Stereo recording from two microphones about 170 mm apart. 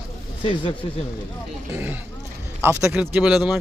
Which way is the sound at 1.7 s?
10° right (ahead or behind).